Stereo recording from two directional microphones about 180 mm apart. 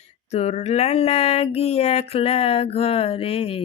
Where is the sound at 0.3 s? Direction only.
35° left (ahead or behind).